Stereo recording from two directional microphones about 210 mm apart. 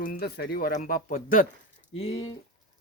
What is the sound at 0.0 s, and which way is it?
Speech, 45° left (ahead or behind).